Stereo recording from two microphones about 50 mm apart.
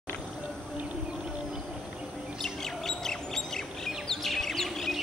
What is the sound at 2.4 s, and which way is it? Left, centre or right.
Bird, centre.